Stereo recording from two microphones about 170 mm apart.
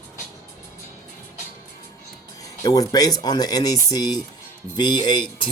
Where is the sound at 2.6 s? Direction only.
20° left (ahead or behind).